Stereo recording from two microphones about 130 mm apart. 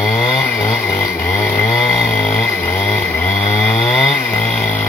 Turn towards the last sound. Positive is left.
turn(degrees=5)  # may be behind; listen again after turning